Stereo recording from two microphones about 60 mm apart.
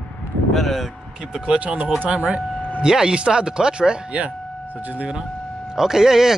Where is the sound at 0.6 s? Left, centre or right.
Centre.